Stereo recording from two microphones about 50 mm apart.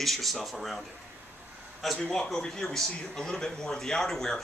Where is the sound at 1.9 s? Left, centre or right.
Centre.